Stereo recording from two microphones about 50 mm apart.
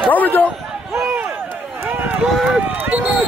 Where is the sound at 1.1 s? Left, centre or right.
Right.